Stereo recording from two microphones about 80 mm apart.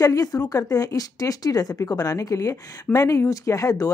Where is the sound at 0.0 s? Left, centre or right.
Left.